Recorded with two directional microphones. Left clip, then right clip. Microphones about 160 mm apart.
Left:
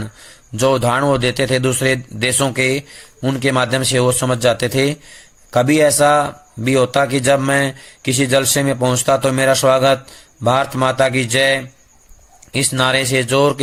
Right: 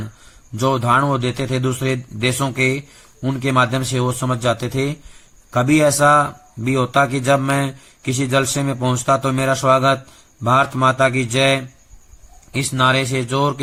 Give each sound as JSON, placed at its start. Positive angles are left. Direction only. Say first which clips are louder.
{"t": 0.5, "sound": "a man's voice", "louder": "left 1 dB", "side_deg": 25}